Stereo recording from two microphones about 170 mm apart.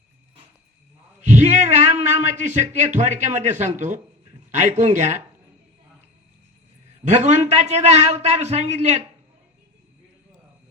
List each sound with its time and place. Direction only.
1.3 s a man's voice: 45° right (ahead or behind)
7.0 s a man's voice: 40° right (ahead or behind)